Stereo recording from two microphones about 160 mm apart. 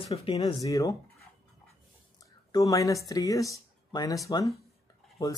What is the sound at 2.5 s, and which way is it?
Speech, 25° left (ahead or behind).